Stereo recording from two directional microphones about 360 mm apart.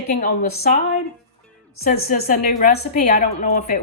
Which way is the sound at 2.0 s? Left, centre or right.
Left.